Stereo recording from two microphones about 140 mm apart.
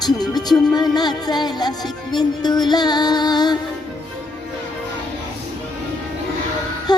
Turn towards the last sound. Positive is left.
turn(degrees=30)  # may be behind; listen again after turning